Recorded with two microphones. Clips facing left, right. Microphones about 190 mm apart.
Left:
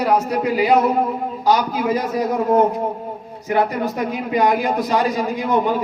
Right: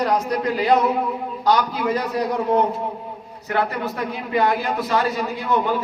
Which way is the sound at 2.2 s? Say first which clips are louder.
Left 4 dB; 45° left (ahead or behind).